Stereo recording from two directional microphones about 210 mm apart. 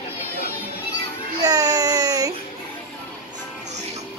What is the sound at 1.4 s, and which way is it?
Baby cry, 15° right (ahead or behind).